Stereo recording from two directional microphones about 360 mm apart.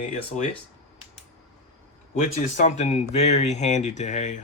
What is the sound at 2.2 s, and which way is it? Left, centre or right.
Speech, centre.